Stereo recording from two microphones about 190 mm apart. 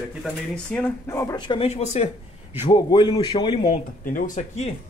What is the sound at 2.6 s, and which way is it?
Speech, 25° left (ahead or behind).